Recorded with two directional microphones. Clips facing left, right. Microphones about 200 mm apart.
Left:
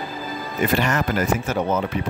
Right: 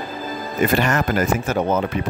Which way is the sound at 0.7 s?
50° right (ahead or behind).